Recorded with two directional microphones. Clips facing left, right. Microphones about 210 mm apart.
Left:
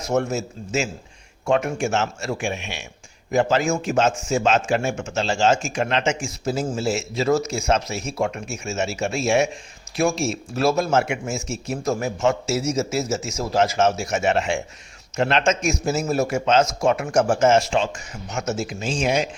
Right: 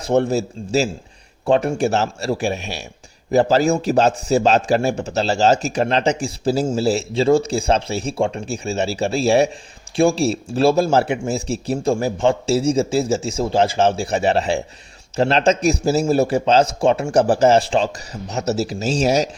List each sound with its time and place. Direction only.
0.0 s speech: 30° right (ahead or behind)